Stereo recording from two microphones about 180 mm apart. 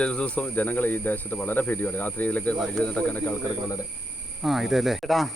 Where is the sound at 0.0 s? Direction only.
5° left (ahead or behind).